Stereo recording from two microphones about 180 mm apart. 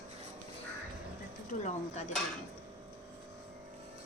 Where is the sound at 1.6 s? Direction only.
40° left (ahead or behind).